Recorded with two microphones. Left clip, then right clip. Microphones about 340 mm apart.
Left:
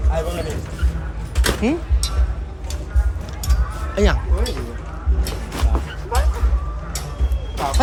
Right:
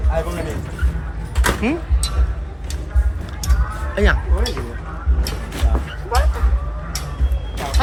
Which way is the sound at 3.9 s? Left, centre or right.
Centre.